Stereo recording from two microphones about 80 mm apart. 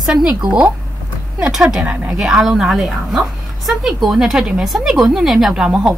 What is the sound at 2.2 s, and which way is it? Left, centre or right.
A woman's voice, centre.